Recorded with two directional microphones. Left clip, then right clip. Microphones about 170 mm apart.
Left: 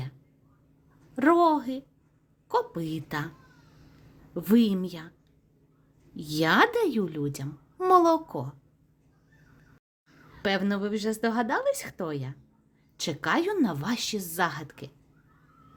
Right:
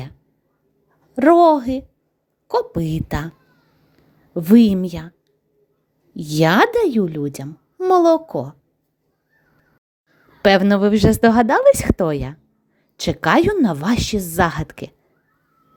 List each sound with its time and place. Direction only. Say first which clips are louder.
1.1 s speech: right 10 dB; 35° right (ahead or behind)
4.4 s speech: right 10 dB; 35° right (ahead or behind)
6.1 s speech: right 8 dB; 40° right (ahead or behind)
10.4 s a woman's voice: right 14 dB; 55° right (ahead or behind)